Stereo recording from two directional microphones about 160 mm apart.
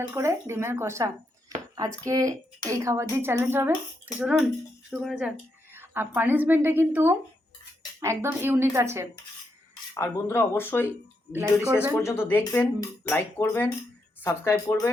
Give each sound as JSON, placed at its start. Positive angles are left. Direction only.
{"t": 0.1, "sound": "a woman's voice", "side_deg": -15}
{"t": 5.7, "sound": "a sound", "side_deg": -15}
{"t": 6.1, "sound": "a woman's voice", "side_deg": -10}
{"t": 9.9, "sound": "speech", "side_deg": 15}
{"t": 11.3, "sound": "a woman's voice", "side_deg": -10}
{"t": 12.0, "sound": "speech", "side_deg": 15}